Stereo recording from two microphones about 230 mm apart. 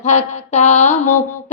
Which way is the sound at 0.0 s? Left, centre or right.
Left.